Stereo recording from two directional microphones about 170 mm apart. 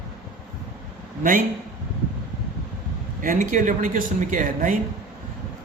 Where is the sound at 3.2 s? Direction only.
50° right (ahead or behind).